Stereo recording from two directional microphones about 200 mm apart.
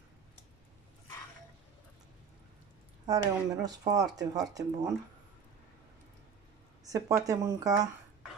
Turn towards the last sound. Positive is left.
turn(degrees=-15)  # may be behind; listen again after turning